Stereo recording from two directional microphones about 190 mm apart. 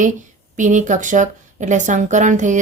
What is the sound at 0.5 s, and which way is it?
A woman's voice, 40° right (ahead or behind).